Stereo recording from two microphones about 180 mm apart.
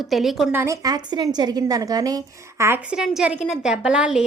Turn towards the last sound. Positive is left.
turn(degrees=-5)  # may be behind; listen again after turning